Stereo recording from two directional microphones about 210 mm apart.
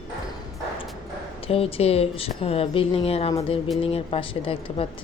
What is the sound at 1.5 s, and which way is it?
Speech, 30° left (ahead or behind).